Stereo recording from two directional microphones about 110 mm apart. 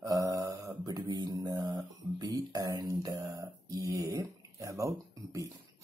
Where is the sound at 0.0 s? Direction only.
30° right (ahead or behind).